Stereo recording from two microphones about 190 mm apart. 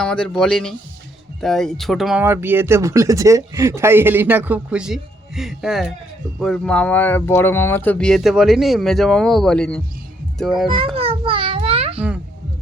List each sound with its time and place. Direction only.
0.0 s a child's voice: 5° left (ahead or behind)
10.7 s music: 30° right (ahead or behind)
11.9 s a sound: 5° right (ahead or behind)